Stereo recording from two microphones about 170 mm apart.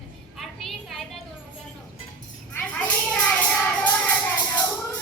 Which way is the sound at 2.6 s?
10° left (ahead or behind).